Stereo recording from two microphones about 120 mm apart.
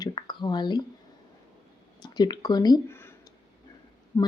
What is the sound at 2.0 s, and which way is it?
Speech, 35° left (ahead or behind).